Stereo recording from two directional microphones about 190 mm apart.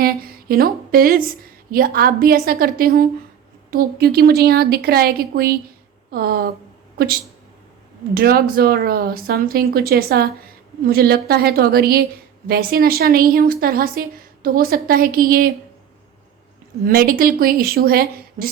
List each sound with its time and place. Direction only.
0.0 s a woman's voice: 50° right (ahead or behind)
16.8 s a woman's voice: 50° right (ahead or behind)